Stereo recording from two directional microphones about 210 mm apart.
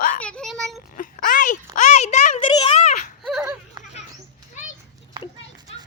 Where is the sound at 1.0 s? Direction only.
40° left (ahead or behind); by 2.8 s 20° left (ahead or behind).